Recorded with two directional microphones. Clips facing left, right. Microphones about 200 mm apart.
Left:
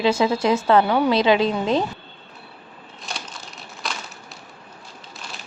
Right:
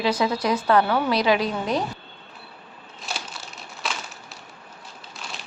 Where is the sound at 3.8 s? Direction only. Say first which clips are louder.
Even; centre (ahead or behind).